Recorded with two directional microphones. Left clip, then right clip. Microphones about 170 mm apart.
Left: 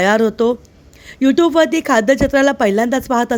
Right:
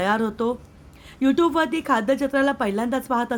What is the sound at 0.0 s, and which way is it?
A woman's voice, 35° left (ahead or behind).